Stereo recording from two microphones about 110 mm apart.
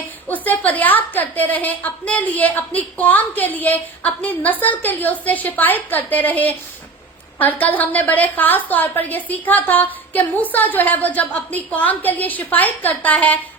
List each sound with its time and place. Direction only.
0.3 s a woman's voice: 15° left (ahead or behind)